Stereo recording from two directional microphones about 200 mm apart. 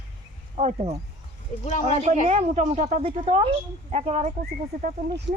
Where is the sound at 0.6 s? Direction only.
30° right (ahead or behind).